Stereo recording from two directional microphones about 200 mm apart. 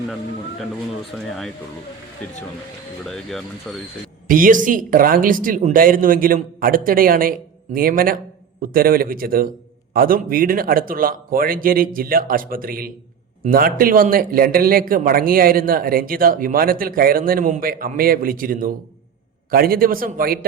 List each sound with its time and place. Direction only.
1.1 s speech: 5° left (ahead or behind)
4.3 s a man's voice: 45° right (ahead or behind)